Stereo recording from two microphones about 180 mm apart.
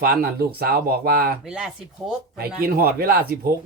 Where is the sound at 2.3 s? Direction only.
60° right (ahead or behind).